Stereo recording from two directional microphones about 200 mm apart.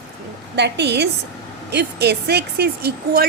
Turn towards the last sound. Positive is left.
turn(degrees=-50)  # may be behind; listen again after turning